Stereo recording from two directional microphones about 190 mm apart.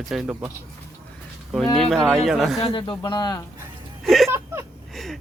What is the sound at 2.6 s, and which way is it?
Speech, 25° left (ahead or behind).